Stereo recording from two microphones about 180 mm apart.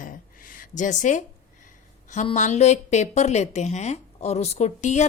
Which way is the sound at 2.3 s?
40° left (ahead or behind).